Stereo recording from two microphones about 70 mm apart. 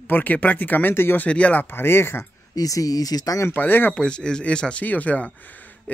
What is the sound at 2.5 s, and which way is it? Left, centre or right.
Speech, left.